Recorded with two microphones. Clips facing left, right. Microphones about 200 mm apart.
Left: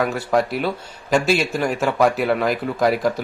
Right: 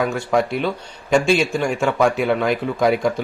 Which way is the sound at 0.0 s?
Centre (ahead or behind).